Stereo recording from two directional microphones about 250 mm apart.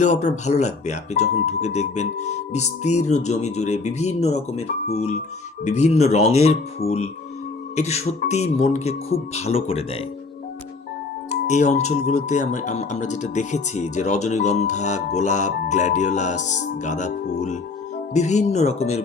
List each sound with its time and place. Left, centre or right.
0.0 s speech: left
11.3 s speech: left